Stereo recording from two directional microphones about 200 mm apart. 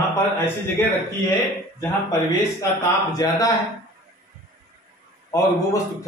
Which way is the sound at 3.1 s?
15° left (ahead or behind).